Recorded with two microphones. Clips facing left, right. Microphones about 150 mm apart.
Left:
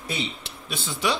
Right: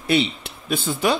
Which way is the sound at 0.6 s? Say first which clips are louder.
Right 6 dB; 50° right (ahead or behind).